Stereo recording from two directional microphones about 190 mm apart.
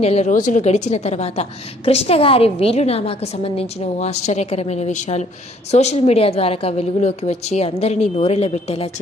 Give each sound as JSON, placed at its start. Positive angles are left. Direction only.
{"t": 0.0, "sound": "a woman's voice", "side_deg": 35}